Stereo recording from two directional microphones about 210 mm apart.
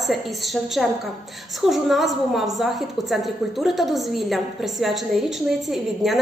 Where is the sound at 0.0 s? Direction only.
Centre (ahead or behind).